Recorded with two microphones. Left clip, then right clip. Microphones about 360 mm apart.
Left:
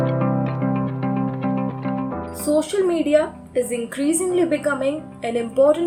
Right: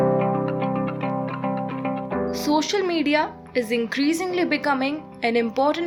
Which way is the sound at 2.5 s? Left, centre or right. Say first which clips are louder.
Left 4 dB; right.